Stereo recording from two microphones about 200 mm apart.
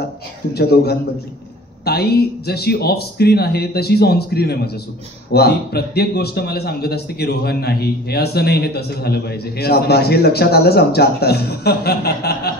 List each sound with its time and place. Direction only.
0.6 s speech: 55° left (ahead or behind)